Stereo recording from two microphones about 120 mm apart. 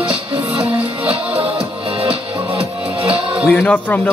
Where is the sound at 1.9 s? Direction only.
50° right (ahead or behind).